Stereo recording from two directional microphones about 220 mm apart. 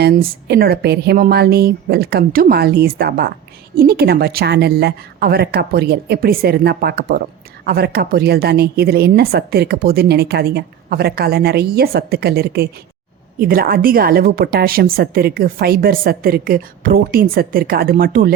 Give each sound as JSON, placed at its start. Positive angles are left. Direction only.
{"t": 0.0, "sound": "a woman's voice", "side_deg": -45}